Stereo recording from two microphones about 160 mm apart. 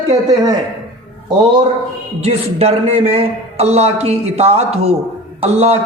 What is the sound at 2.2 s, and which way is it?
Speech, 40° right (ahead or behind).